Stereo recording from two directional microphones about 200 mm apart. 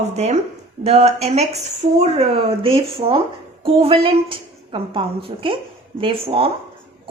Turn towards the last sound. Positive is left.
turn(degrees=-30)  # may be behind; listen again after turning